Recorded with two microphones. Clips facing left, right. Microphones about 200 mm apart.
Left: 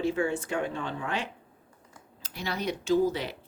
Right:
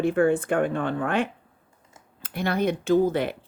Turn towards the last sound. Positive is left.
turn(degrees=-55)  # may be behind; listen again after turning